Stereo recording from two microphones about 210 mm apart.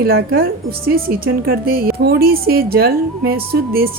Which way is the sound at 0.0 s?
45° right (ahead or behind).